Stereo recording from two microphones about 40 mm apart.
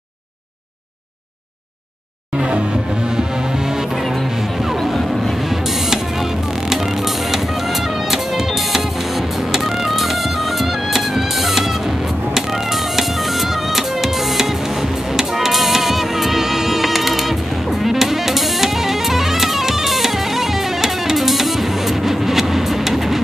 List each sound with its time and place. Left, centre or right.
2.3 s music: right
4.0 s music: centre
4.4 s music: centre